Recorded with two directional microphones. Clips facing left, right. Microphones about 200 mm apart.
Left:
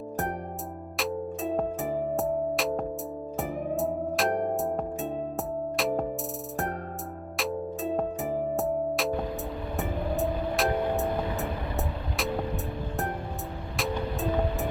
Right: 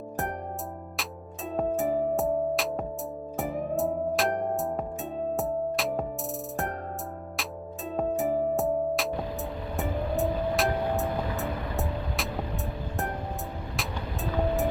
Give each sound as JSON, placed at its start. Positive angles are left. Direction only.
{"t": 2.1, "sound": "music", "side_deg": 0}
{"t": 8.5, "sound": "music", "side_deg": 0}
{"t": 13.7, "sound": "music", "side_deg": 0}